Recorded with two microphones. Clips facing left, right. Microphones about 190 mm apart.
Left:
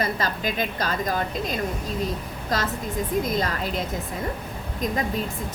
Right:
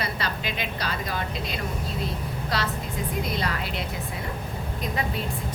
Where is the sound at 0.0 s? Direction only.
45° left (ahead or behind).